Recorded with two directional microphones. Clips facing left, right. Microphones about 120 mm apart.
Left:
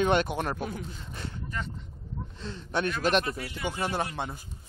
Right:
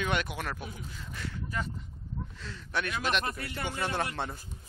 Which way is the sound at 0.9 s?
30° left (ahead or behind).